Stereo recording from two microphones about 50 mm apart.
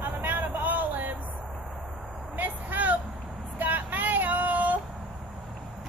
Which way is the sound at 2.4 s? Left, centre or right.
Right.